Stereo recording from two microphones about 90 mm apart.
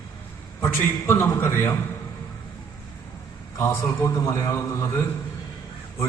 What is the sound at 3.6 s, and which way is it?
A man's voice, 35° left (ahead or behind).